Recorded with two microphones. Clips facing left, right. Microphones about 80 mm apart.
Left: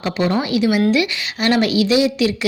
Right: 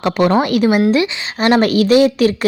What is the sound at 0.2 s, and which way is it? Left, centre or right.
Speech, right.